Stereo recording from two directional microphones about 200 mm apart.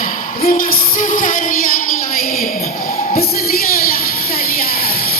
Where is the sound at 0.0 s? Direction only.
45° left (ahead or behind).